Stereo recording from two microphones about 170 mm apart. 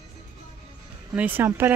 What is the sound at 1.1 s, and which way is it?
Speech, 10° right (ahead or behind).